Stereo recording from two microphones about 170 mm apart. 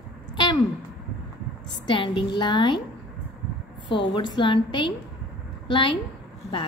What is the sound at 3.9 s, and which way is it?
Speech, 30° left (ahead or behind).